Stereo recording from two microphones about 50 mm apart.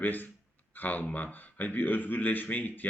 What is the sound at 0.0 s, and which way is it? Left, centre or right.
Speech, left.